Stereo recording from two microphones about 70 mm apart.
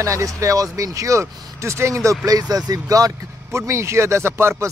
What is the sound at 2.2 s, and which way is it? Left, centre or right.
Speech, right.